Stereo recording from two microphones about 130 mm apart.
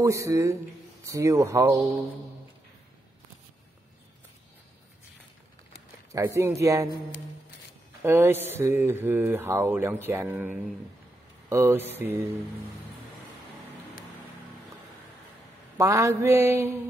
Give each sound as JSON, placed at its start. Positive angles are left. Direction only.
{"t": 0.0, "sound": "mantra", "side_deg": -25}
{"t": 6.1, "sound": "mantra", "side_deg": -20}
{"t": 8.0, "sound": "speech", "side_deg": -20}
{"t": 11.4, "sound": "mantra", "side_deg": -20}
{"t": 15.8, "sound": "mantra", "side_deg": -25}